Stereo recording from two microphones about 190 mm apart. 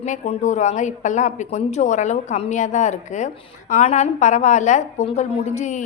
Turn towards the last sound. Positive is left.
turn(degrees=35)  # may be behind; listen again after turning